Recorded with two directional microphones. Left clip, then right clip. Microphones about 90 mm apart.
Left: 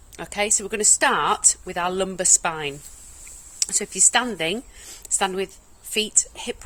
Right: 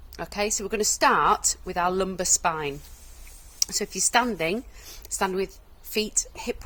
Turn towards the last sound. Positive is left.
turn(degrees=30)  # may be behind; listen again after turning